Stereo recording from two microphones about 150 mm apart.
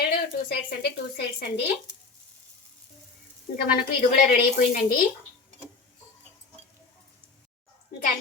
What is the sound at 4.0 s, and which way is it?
A woman's voice, 80° left.